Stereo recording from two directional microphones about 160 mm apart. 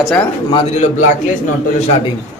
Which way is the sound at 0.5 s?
40° left (ahead or behind).